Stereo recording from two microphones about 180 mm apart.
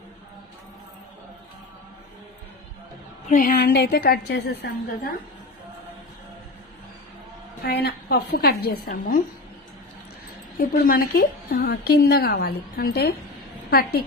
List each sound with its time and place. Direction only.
3.3 s a woman's voice: 50° left (ahead or behind)
7.6 s a woman's voice: 60° left (ahead or behind)
10.6 s a woman's voice: 55° left (ahead or behind)